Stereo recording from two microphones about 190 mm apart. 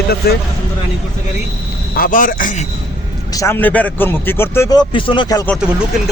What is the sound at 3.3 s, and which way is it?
A man's voice, 15° left (ahead or behind).